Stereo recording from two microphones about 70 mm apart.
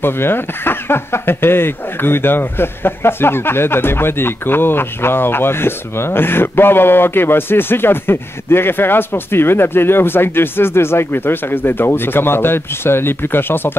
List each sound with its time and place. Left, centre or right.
0.0 s speech: left